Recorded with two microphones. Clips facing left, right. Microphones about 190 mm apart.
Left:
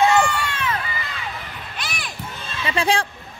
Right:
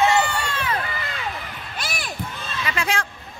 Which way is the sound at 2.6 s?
30° left (ahead or behind).